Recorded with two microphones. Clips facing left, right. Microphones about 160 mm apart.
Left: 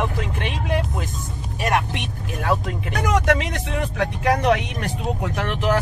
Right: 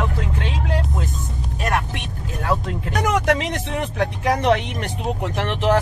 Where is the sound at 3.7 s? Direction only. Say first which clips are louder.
Left 1 dB; 25° right (ahead or behind).